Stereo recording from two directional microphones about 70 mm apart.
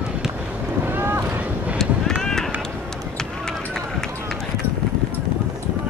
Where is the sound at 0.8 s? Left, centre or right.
Right.